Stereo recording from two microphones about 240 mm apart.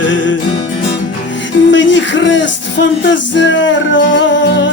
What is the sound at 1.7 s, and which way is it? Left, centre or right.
Music, left.